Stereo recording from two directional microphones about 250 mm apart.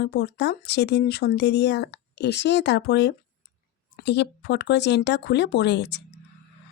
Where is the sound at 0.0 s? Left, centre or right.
Left.